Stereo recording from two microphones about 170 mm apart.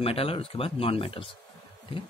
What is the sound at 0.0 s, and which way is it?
Speech, 35° left (ahead or behind).